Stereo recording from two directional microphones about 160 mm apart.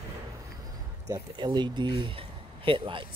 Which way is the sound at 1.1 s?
25° right (ahead or behind).